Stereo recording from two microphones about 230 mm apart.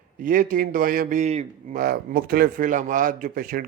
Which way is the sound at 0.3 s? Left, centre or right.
Right.